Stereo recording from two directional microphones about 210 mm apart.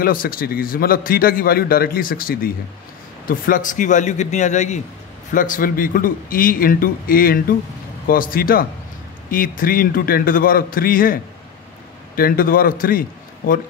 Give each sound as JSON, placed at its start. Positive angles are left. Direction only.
{"t": 0.0, "sound": "a man's voice", "side_deg": 45}
{"t": 12.2, "sound": "a man's voice", "side_deg": 45}